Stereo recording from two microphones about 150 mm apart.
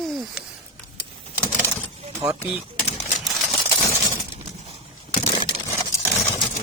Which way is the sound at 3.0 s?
Centre (ahead or behind).